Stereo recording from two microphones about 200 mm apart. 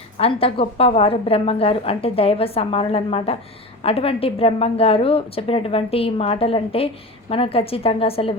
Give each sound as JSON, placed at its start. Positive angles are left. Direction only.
{"t": 0.2, "sound": "a woman's voice", "side_deg": 30}